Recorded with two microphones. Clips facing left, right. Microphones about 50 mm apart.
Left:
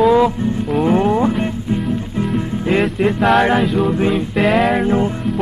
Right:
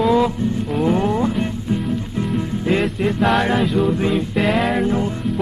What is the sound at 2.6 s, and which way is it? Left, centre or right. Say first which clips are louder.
Music: left 3 dB; centre.